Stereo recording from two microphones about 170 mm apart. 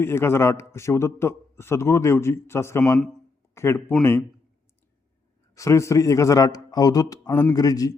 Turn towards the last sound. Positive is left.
turn(degrees=20)  # may be behind; listen again after turning